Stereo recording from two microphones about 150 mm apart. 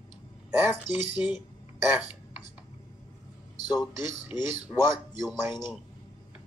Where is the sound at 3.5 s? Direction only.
25° left (ahead or behind).